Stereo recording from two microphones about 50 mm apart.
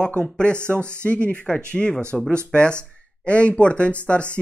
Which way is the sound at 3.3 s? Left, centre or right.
Left.